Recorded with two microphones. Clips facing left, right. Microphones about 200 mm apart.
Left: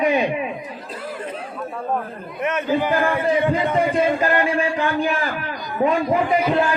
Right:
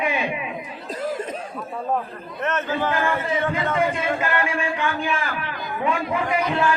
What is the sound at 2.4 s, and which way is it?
A man's voice, 10° left (ahead or behind).